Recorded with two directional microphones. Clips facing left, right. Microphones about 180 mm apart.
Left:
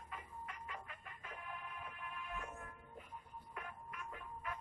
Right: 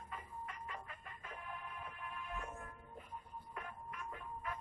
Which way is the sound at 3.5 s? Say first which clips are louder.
Right 1 dB; 35° right (ahead or behind).